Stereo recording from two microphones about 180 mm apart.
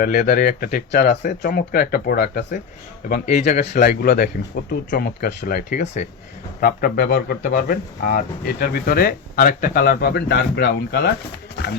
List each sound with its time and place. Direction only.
0.0 s speech: 55° left (ahead or behind); by 1.4 s 70° left (ahead or behind)
1.4 s speech: 55° left (ahead or behind)